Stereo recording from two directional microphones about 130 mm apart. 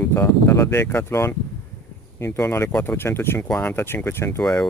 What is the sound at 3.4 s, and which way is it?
Speech, 10° left (ahead or behind).